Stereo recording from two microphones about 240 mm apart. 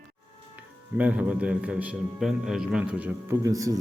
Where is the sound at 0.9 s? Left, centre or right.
Centre.